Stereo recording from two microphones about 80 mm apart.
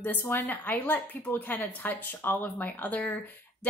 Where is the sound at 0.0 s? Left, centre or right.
Left.